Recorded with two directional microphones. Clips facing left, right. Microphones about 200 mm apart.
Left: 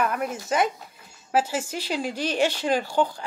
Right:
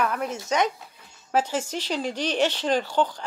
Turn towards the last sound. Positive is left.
turn(degrees=10)  # may be behind; listen again after turning